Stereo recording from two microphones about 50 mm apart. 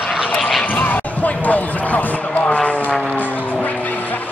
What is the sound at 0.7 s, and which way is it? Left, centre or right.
Basketball bounce, left.